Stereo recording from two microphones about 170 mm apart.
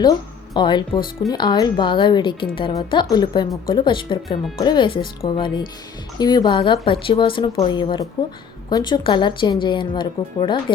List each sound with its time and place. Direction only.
0.5 s speech: 25° left (ahead or behind)